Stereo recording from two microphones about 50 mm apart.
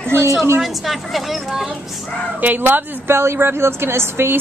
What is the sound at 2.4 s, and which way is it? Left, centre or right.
A woman's voice, right.